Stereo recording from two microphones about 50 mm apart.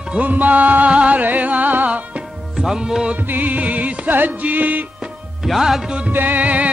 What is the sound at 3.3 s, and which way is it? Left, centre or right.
Music, right.